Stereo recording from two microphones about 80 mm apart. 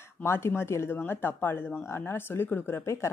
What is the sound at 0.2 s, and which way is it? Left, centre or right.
Speech, left.